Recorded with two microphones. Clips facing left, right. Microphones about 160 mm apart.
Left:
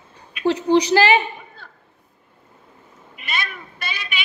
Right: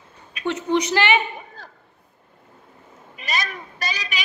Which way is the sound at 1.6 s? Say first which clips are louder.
Right 2 dB; 40° right (ahead or behind).